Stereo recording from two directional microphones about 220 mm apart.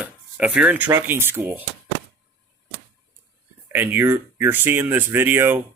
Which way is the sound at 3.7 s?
10° right (ahead or behind).